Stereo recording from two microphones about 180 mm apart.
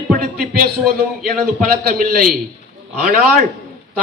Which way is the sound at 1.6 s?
50° right (ahead or behind).